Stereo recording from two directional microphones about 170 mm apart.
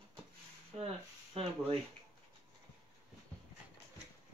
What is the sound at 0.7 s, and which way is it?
Speech, 35° right (ahead or behind).